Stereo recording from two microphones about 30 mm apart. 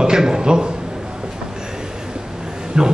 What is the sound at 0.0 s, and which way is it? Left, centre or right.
Speech, right.